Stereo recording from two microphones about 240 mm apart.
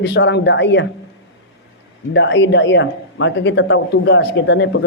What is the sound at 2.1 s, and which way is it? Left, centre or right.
Speech, left.